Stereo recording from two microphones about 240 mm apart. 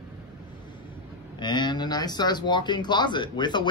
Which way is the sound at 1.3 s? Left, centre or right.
Centre.